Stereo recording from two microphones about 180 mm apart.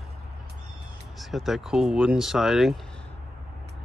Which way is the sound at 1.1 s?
Centre (ahead or behind).